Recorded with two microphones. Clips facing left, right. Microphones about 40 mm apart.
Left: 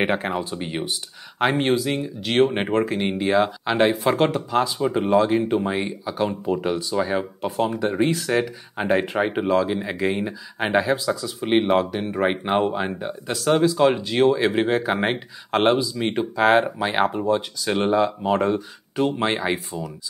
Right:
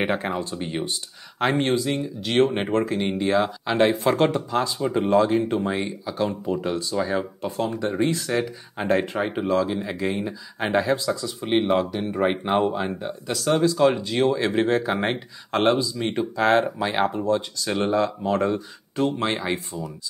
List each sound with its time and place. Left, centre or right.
0.0 s speech: centre
11.4 s speech: centre